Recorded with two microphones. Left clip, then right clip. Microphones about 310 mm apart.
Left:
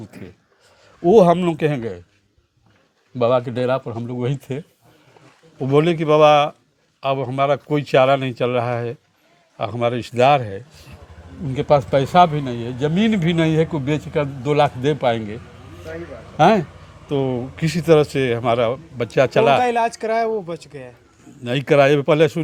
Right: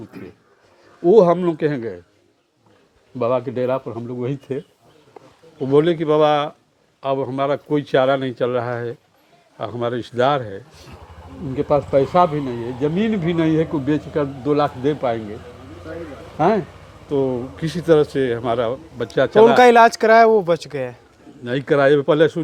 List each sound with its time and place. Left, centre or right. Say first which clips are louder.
1.0 s a man's voice: even; left
3.2 s a man's voice: left 2 dB; left
5.6 s a man's voice: right 1 dB; left
16.4 s speech: left 3 dB; left
17.1 s a man's voice: right 1 dB; left
19.5 s speech: right 7 dB; right
21.4 s a man's voice: left 1 dB; left